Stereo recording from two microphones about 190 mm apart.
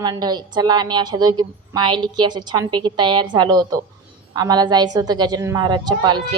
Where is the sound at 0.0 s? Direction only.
20° right (ahead or behind).